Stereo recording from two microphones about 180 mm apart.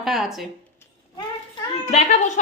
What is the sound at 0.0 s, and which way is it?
Speech, centre (ahead or behind).